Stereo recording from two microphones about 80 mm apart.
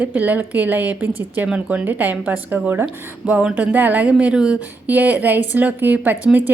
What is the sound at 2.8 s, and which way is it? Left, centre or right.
A woman's voice, centre.